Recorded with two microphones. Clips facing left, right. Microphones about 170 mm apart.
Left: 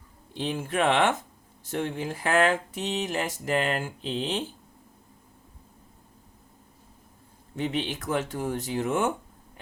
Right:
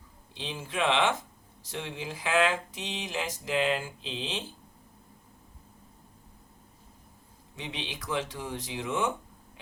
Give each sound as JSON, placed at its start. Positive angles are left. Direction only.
{"t": 0.3, "sound": "speech", "side_deg": 50}
{"t": 7.5, "sound": "speech", "side_deg": 50}